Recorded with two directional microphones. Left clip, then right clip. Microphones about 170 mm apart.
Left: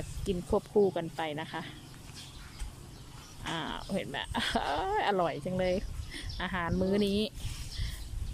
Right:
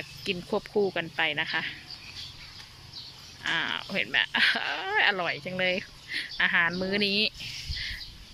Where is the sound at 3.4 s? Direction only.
25° left (ahead or behind).